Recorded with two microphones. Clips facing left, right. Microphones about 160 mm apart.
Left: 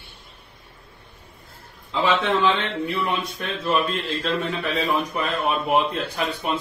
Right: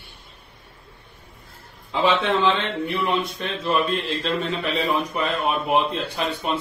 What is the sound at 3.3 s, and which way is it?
Speech, centre (ahead or behind).